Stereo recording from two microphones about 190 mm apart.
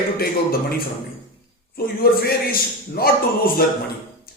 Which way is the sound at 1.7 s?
50° left (ahead or behind).